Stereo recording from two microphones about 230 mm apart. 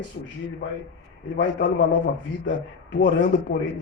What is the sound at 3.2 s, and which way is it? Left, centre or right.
Speech, left.